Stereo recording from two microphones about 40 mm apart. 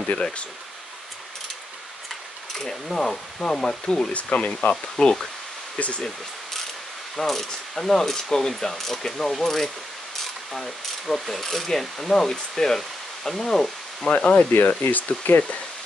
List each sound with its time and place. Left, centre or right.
0.1 s speech: left
2.5 s speech: centre
4.1 s speech: left
5.0 s speech: left
5.8 s speech: left
7.2 s speech: centre
14.0 s speech: left
14.7 s speech: left